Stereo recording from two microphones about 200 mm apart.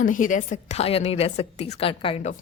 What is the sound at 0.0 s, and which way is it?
A woman's voice, 40° left (ahead or behind).